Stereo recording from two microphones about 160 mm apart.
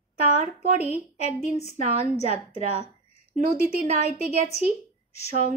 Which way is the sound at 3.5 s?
40° left (ahead or behind).